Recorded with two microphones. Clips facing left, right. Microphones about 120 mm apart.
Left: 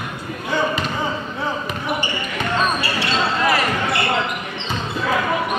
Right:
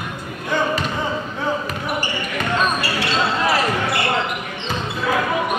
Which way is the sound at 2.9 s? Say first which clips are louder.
Even; 5° right (ahead or behind).